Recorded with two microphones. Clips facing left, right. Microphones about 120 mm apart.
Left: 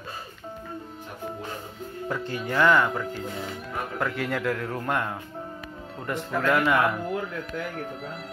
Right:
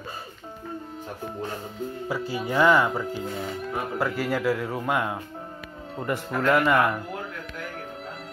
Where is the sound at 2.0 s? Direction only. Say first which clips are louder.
Even; 5° right (ahead or behind).